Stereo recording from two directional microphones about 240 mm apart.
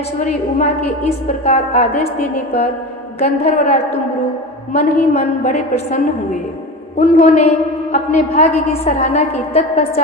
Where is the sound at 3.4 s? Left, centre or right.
Left.